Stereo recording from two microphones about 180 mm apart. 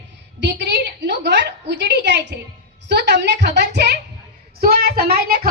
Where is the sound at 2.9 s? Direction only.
70° right (ahead or behind).